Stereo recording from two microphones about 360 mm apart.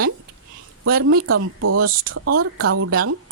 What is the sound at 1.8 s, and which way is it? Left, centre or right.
Speech, right.